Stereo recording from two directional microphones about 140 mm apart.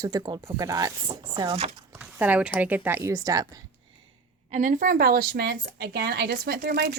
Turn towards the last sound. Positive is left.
turn(degrees=-90)